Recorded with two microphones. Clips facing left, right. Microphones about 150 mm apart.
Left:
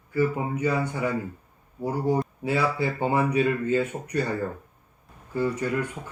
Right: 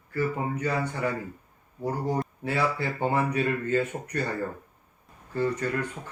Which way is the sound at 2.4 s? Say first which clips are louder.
Left 2 dB; 15° left (ahead or behind).